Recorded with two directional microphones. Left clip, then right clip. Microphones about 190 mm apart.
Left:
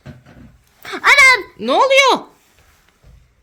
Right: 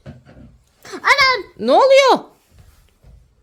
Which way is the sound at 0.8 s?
15° left (ahead or behind).